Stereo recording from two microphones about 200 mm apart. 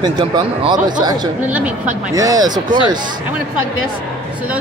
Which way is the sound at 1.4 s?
5° right (ahead or behind).